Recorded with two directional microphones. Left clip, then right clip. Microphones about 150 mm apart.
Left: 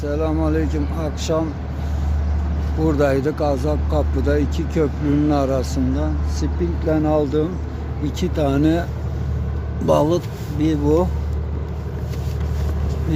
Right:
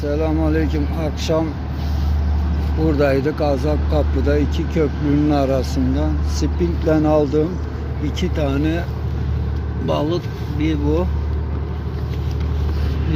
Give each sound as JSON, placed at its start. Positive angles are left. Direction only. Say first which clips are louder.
{"t": 0.0, "sound": "speech", "louder": "right 1 dB", "side_deg": 10}
{"t": 2.8, "sound": "speech", "louder": "right 1 dB", "side_deg": 20}
{"t": 8.0, "sound": "speech", "louder": "left 1 dB", "side_deg": 35}
{"t": 9.8, "sound": "speech", "louder": "left 4 dB", "side_deg": 35}